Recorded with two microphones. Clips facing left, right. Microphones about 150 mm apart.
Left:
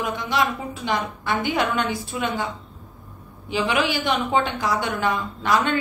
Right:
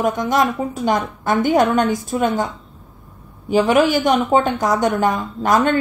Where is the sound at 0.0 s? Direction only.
45° right (ahead or behind).